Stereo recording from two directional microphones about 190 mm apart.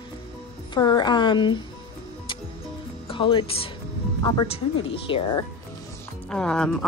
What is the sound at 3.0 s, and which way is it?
A woman's voice, 25° left (ahead or behind).